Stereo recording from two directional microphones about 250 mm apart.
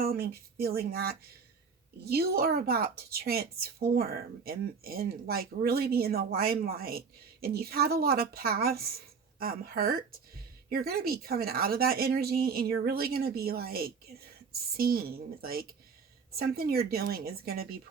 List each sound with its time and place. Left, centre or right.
0.0 s a woman's voice: right